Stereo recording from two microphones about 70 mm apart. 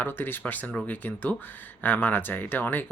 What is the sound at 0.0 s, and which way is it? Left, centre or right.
Speech, left.